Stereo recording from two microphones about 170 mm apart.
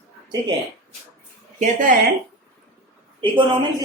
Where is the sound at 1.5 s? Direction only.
50° right (ahead or behind).